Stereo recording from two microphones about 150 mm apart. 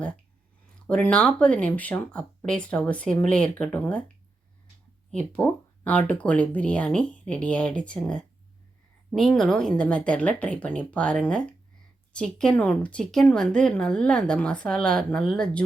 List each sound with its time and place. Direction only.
0.9 s speech: 10° left (ahead or behind)
5.1 s speech: 10° left (ahead or behind)